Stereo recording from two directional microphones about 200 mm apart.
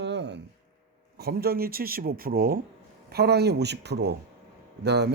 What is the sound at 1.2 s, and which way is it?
Speech, 50° right (ahead or behind).